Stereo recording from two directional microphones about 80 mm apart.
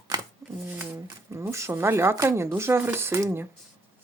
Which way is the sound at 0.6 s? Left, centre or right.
Right.